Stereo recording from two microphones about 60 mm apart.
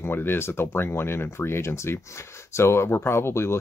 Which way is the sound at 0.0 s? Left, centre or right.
Left.